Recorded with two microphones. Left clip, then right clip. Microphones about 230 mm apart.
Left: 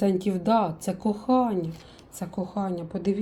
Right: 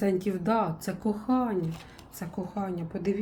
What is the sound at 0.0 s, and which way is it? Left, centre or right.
Speech, centre.